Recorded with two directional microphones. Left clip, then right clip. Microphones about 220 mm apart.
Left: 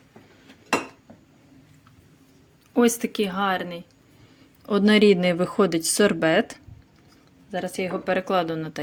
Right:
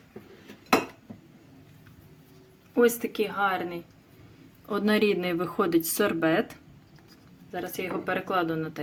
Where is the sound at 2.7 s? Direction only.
40° left (ahead or behind).